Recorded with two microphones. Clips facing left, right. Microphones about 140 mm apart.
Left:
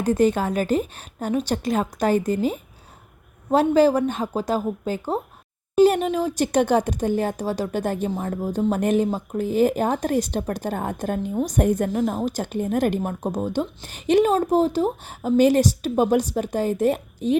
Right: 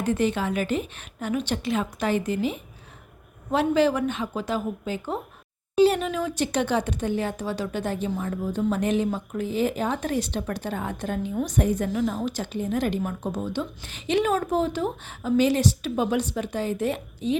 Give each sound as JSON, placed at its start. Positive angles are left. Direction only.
{"t": 0.0, "sound": "a woman's voice", "side_deg": 40}